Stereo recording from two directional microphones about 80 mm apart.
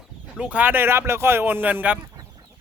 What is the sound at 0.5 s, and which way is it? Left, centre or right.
Speech, right.